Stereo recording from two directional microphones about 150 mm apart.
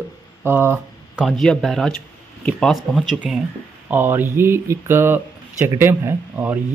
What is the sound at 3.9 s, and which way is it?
Speech, 15° right (ahead or behind).